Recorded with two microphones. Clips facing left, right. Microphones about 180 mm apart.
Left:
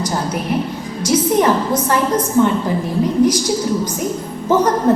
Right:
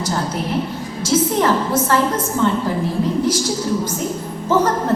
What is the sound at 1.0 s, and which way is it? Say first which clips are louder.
A woman's voice: left 2 dB; 15° left (ahead or behind).